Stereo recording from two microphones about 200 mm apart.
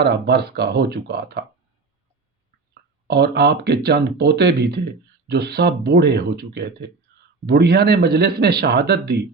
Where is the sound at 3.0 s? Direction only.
55° right (ahead or behind).